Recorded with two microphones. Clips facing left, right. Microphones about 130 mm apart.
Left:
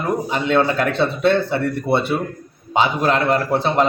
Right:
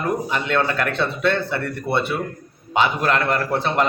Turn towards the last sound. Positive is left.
turn(degrees=30)  # may be behind; listen again after turning